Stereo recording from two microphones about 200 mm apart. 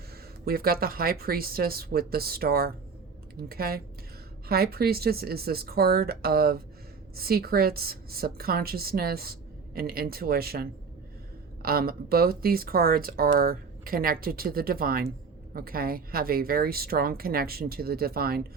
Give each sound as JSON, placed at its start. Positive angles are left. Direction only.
{"t": 0.4, "sound": "a woman's voice", "side_deg": -50}